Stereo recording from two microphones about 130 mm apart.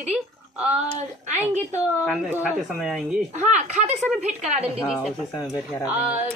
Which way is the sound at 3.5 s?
60° right (ahead or behind).